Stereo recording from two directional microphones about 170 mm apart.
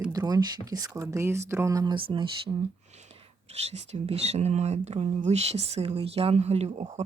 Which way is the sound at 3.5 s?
40° right (ahead or behind).